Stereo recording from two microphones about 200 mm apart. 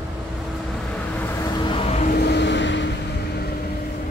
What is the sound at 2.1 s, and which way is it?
Vehicle, 55° left (ahead or behind).